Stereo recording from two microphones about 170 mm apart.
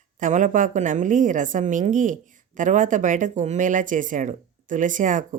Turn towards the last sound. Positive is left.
turn(degrees=-50)  # may be behind; listen again after turning